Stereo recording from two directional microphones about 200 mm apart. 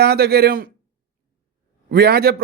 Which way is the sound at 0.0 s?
50° right (ahead or behind).